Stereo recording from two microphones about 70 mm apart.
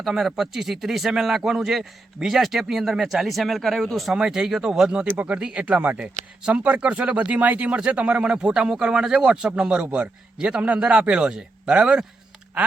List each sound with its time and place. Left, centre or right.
0.0 s a man's voice: centre
5.0 s speech: right